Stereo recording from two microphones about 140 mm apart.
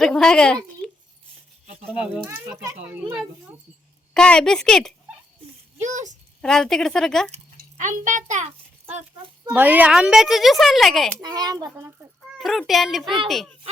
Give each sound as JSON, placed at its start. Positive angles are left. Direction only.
{"t": 0.0, "sound": "speech", "side_deg": 5}
{"t": 1.9, "sound": "a child's voice", "side_deg": -10}
{"t": 4.1, "sound": "speech", "side_deg": 5}
{"t": 5.7, "sound": "a child's voice", "side_deg": -60}
{"t": 6.4, "sound": "speech", "side_deg": 5}
{"t": 7.5, "sound": "a child's voice", "side_deg": -65}
{"t": 9.5, "sound": "speech", "side_deg": -10}
{"t": 11.2, "sound": "a child's voice", "side_deg": -30}
{"t": 12.4, "sound": "speech", "side_deg": 0}